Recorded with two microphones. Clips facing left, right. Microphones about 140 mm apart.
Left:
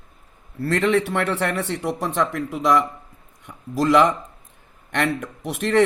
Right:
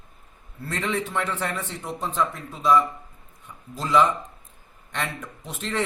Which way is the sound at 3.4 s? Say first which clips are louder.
Left 12 dB; 80° left.